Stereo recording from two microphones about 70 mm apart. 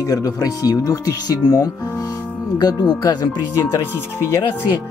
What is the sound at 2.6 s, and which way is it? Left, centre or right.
Speech, left.